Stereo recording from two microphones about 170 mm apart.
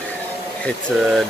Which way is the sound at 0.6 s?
Centre (ahead or behind).